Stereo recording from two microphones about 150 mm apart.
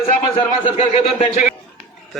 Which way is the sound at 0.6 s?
35° left (ahead or behind).